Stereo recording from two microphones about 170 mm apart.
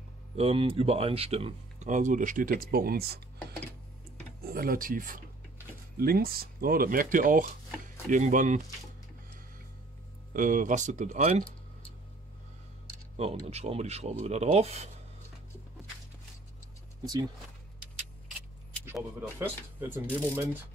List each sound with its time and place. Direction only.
0.4 s speech: 30° right (ahead or behind); by 3.2 s 65° right (ahead or behind)
4.4 s speech: 60° right (ahead or behind)
10.3 s speech: 50° right (ahead or behind)
13.5 s speech: 40° right (ahead or behind)
17.0 s speech: 25° right (ahead or behind)
19.3 s speech: 10° right (ahead or behind)